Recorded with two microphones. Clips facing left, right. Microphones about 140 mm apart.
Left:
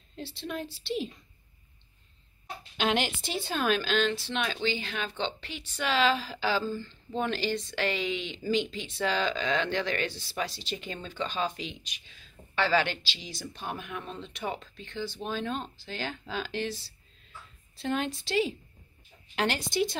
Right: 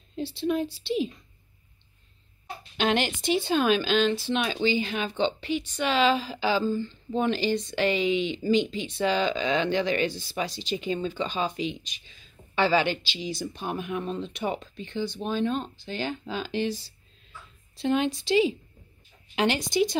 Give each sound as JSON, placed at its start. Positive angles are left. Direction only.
{"t": 0.4, "sound": "speech", "side_deg": -5}
{"t": 2.8, "sound": "speech", "side_deg": 5}
{"t": 15.0, "sound": "speech", "side_deg": 0}